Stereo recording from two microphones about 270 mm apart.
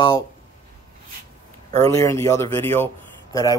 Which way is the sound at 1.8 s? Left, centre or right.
Centre.